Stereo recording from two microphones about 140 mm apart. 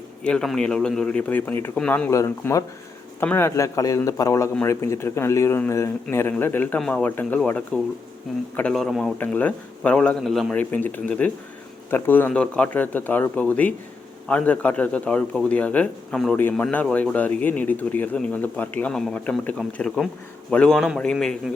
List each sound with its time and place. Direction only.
0.3 s speech: 5° left (ahead or behind)
2.0 s a man's voice: 20° left (ahead or behind); by 21.5 s 5° left (ahead or behind)